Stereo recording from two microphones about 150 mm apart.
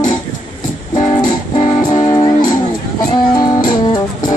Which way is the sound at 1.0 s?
30° left (ahead or behind).